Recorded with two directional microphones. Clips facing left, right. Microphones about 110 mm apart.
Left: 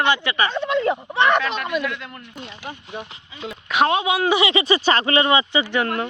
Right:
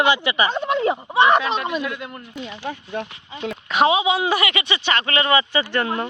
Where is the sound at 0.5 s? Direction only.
45° right (ahead or behind).